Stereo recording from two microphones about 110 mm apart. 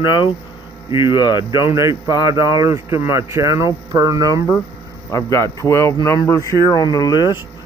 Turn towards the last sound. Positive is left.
turn(degrees=35)  # may be behind; listen again after turning